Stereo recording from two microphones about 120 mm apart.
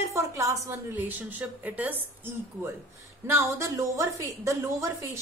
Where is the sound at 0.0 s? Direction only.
25° right (ahead or behind).